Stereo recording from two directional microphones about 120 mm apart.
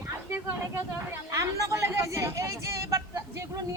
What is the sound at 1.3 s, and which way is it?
Speech, 25° right (ahead or behind).